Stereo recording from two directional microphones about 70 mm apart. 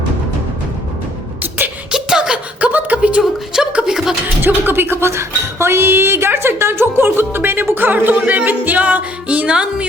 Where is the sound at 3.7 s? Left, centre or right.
Centre.